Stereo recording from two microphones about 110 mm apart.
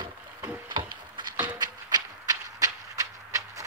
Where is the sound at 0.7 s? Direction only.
45° right (ahead or behind).